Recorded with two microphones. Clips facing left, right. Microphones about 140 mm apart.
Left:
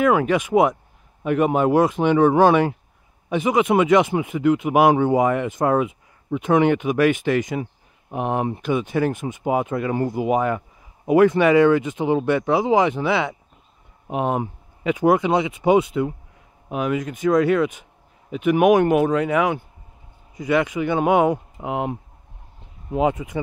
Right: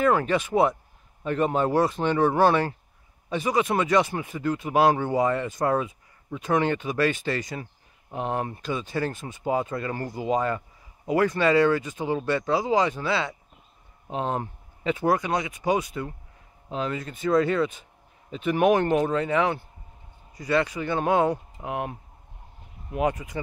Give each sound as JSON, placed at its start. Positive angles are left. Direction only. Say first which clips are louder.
{"t": 0.0, "sound": "speech", "louder": "left 4 dB", "side_deg": 10}
{"t": 15.0, "sound": "speech", "louder": "left 7 dB", "side_deg": 20}
{"t": 16.6, "sound": "speech", "louder": "left 6 dB", "side_deg": 10}